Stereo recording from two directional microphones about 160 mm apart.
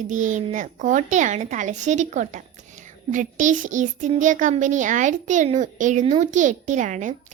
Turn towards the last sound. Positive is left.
turn(degrees=-50)  # may be behind; listen again after turning